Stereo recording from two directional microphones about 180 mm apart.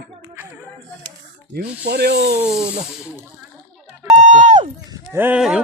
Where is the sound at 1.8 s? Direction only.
65° right (ahead or behind).